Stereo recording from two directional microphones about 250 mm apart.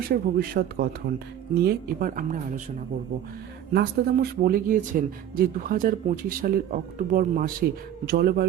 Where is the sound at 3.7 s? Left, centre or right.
Right.